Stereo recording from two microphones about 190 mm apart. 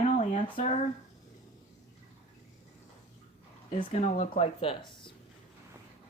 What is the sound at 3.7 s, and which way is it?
Speech, 35° left (ahead or behind).